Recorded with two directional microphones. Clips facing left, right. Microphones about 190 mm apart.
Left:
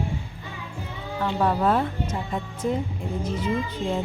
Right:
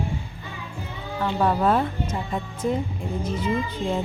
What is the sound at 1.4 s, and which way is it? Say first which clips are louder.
Speech: right 1 dB; 20° right (ahead or behind).